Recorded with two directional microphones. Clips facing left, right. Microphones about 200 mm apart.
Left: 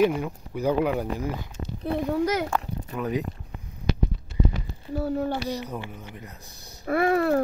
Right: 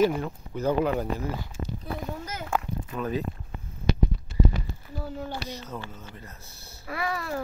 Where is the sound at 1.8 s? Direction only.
70° left (ahead or behind).